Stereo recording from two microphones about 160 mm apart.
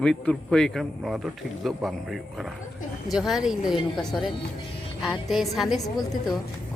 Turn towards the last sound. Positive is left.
turn(degrees=25)  # may be behind; listen again after turning